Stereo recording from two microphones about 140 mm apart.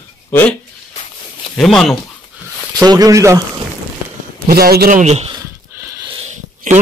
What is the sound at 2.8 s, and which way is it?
Speech, 25° right (ahead or behind).